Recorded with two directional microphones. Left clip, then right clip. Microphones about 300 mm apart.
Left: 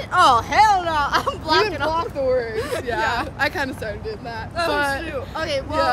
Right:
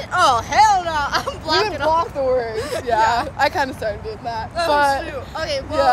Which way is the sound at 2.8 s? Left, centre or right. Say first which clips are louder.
Right 8 dB; centre.